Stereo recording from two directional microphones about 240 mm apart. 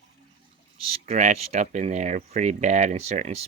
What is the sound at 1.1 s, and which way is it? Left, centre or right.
Speech, right.